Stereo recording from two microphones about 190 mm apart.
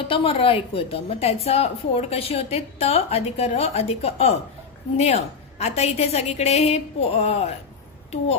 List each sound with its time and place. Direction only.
0.0 s a woman's voice: 25° left (ahead or behind)